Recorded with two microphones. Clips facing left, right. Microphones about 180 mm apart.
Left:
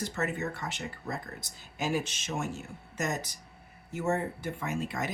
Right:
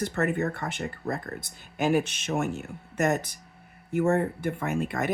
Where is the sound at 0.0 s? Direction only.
55° right (ahead or behind).